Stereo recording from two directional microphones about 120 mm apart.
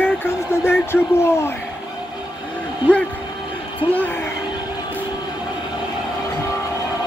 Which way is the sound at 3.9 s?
15° left (ahead or behind).